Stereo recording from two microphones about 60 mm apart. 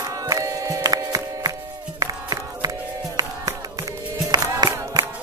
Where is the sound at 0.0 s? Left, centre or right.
Right.